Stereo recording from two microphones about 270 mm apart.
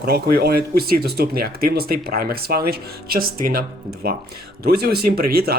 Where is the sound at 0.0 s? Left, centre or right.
Right.